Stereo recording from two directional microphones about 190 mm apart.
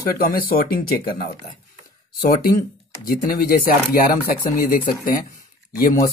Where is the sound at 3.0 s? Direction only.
50° left (ahead or behind).